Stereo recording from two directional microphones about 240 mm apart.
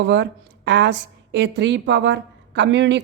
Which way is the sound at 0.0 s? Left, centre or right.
Right.